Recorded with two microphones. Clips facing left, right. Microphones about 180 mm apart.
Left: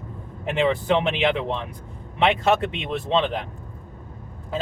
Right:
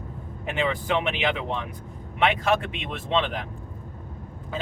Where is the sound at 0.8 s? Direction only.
30° left (ahead or behind).